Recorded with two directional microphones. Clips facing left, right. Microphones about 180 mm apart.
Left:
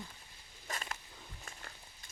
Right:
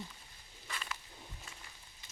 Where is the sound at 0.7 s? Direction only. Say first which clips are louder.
Left 3 dB; 45° left (ahead or behind).